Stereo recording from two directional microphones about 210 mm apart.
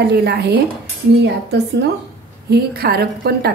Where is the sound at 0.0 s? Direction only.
50° right (ahead or behind).